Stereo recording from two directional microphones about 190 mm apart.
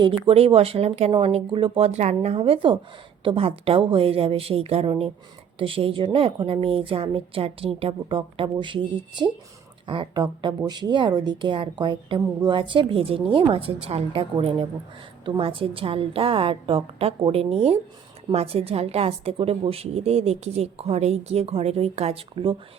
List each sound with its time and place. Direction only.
0.0 s a woman's voice: 30° right (ahead or behind)